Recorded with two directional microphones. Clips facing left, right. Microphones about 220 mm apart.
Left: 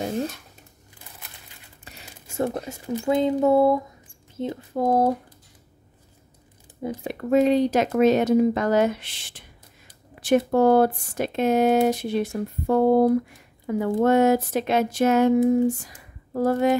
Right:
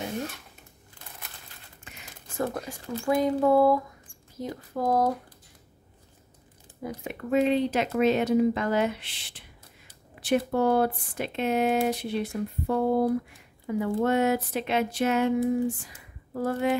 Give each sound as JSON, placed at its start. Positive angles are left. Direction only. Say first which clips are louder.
{"t": 1.9, "sound": "a sound", "louder": "left 3 dB", "side_deg": 35}
{"t": 2.3, "sound": "speech", "louder": "left 4 dB", "side_deg": 25}
{"t": 7.0, "sound": "speech", "louder": "left 5 dB", "side_deg": 40}